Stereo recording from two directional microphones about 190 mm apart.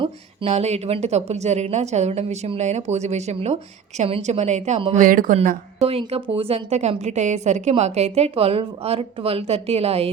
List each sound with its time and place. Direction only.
0.0 s speech: 35° right (ahead or behind)
5.0 s speech: 45° right (ahead or behind)
5.8 s speech: 30° right (ahead or behind)